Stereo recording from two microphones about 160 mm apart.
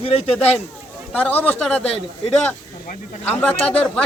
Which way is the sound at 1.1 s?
10° left (ahead or behind).